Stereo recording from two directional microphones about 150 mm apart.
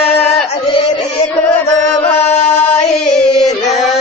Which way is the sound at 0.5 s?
40° left (ahead or behind).